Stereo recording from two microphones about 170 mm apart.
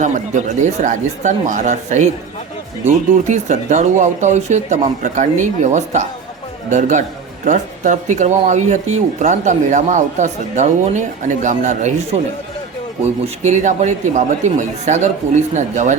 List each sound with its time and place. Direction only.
0.0 s speech: 45° right (ahead or behind)
13.2 s speech: 40° right (ahead or behind)